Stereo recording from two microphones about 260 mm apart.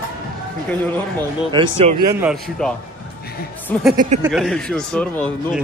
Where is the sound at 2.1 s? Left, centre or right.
Centre.